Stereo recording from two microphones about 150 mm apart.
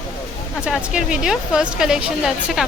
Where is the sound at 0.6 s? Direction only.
5° right (ahead or behind).